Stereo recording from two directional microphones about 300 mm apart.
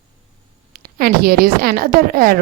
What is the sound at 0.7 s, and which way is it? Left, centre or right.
A woman's voice, right.